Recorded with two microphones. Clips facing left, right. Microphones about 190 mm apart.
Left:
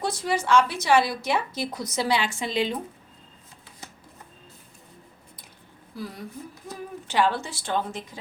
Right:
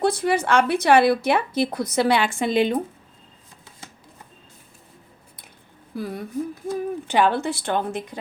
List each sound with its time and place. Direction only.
0.0 s speech: 60° right (ahead or behind)
6.0 s speech: 55° right (ahead or behind)